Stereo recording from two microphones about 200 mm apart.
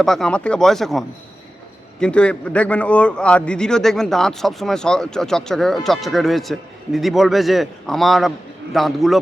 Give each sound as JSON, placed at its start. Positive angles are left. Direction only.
{"t": 0.0, "sound": "a man's voice", "side_deg": 0}